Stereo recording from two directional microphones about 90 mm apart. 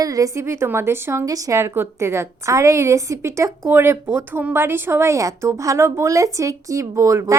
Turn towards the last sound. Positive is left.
turn(degrees=-35)  # may be behind; listen again after turning